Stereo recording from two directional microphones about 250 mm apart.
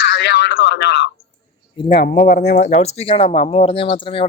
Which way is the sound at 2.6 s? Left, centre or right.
Left.